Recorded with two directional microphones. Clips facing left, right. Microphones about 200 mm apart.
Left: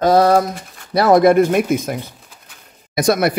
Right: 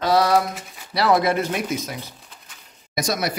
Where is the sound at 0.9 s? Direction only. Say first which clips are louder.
Left 8 dB; 50° left (ahead or behind).